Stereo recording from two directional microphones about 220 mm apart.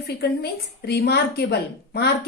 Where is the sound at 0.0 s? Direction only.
45° left (ahead or behind).